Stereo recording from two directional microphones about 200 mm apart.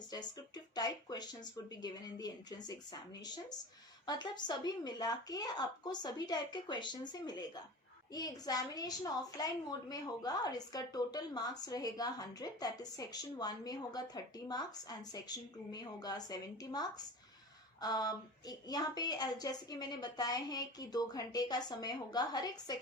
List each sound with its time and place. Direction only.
0.1 s a woman's voice: 20° left (ahead or behind)